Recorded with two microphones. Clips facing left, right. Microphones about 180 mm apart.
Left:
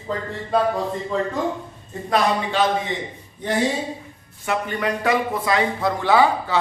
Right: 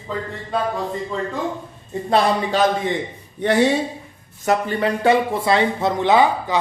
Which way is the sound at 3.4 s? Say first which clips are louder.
Right 6 dB; 70° right (ahead or behind).